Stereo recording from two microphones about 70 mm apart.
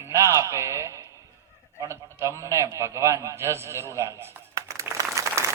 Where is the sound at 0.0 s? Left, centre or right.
Right.